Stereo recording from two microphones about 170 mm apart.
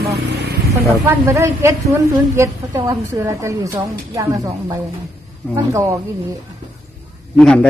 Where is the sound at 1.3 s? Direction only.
15° right (ahead or behind).